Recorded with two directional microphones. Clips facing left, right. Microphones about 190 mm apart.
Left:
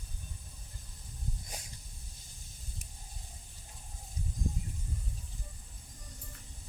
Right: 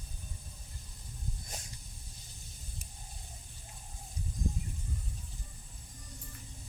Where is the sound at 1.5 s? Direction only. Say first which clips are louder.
Even; 10° left (ahead or behind).